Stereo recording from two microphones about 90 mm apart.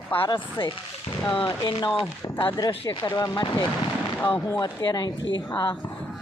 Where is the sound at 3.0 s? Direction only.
45° left (ahead or behind).